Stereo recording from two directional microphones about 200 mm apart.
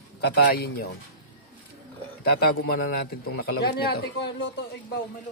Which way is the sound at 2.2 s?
50° left (ahead or behind).